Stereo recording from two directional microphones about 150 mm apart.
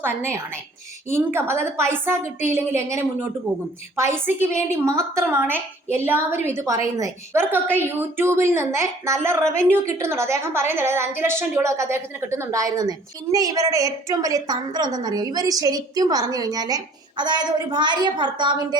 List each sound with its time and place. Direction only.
0.0 s a woman's voice: 15° right (ahead or behind)